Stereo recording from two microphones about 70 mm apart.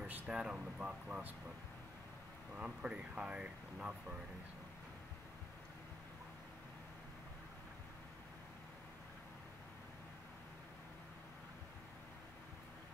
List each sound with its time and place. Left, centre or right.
0.0 s speech: centre
2.5 s speech: centre